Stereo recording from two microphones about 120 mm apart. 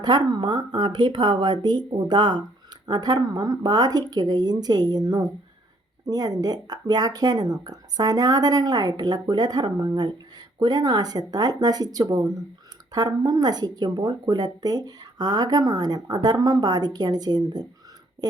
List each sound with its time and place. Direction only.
0.0 s speech: 35° right (ahead or behind)